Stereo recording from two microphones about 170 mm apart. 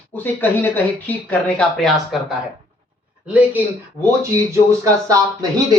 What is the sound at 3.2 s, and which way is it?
Speech, 10° right (ahead or behind).